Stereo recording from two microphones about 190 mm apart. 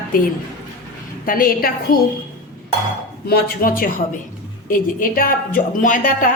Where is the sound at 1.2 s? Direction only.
50° left (ahead or behind).